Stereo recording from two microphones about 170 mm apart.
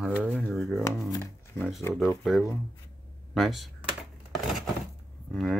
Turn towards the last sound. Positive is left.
turn(degrees=0)  # may be behind; listen again after turning